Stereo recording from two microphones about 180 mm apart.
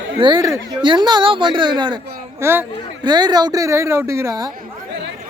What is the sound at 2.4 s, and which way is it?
Speech, 15° right (ahead or behind).